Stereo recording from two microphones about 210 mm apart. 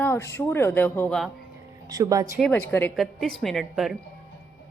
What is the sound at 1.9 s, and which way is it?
Speech, 15° right (ahead or behind).